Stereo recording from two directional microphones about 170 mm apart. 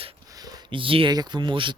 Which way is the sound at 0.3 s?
20° right (ahead or behind).